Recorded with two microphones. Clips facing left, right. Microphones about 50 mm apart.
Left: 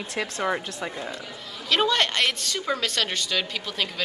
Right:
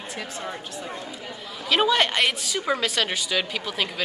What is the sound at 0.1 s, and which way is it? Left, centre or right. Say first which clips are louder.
Speech: left 7 dB; left.